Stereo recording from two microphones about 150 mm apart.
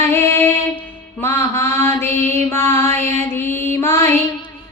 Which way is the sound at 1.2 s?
15° left (ahead or behind).